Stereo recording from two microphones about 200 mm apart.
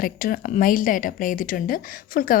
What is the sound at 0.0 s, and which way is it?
A woman's voice, 45° left (ahead or behind).